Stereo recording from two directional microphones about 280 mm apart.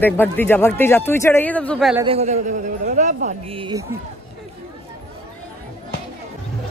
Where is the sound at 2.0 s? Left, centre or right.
Right.